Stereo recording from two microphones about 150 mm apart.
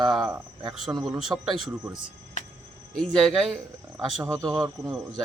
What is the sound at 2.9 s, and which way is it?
Speech, 5° left (ahead or behind).